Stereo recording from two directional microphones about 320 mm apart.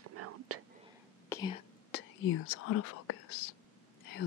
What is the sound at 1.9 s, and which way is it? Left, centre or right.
Speech, left.